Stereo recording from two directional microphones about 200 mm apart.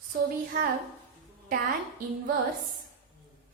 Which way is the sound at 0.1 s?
45° right (ahead or behind).